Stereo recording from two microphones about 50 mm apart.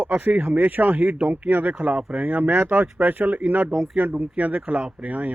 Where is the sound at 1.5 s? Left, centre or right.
Right.